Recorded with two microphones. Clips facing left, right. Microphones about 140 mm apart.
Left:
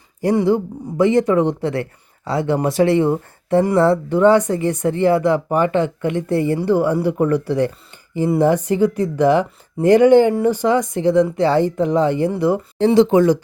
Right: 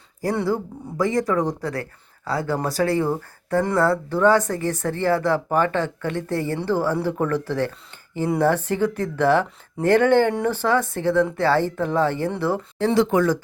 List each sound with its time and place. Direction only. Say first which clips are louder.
0.3 s speech: left 8 dB; 20° left (ahead or behind)